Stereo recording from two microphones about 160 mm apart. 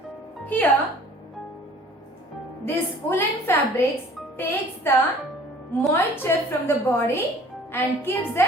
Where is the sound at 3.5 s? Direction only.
15° left (ahead or behind).